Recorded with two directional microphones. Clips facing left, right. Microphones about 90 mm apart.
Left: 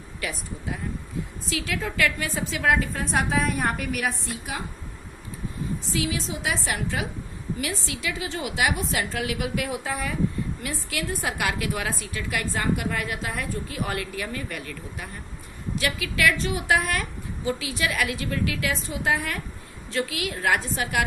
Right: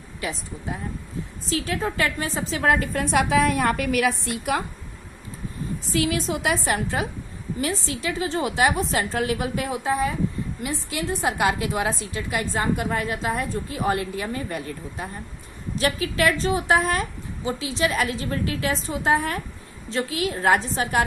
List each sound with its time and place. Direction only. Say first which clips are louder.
0.2 s a woman's voice: right 2 dB; 25° right (ahead or behind); by 2.9 s 45° right (ahead or behind)
2.9 s a woman's voice: right 4 dB; 70° right (ahead or behind)
5.9 s a woman's voice: right 6 dB; 50° right (ahead or behind); by 21.0 s 35° right (ahead or behind)